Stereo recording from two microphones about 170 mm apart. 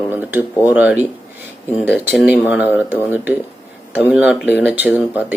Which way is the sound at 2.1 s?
10° right (ahead or behind).